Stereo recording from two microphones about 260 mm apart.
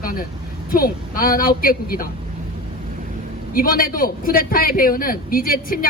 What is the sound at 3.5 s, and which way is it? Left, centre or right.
Speech, left.